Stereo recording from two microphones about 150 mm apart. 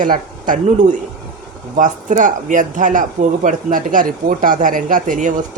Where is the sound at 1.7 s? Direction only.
55° right (ahead or behind).